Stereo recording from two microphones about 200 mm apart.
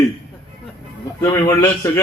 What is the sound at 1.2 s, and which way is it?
Speech, 15° left (ahead or behind).